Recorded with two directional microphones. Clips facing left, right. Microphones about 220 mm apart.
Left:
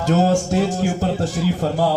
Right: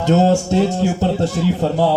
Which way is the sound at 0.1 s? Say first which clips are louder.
Right 3 dB; 25° right (ahead or behind).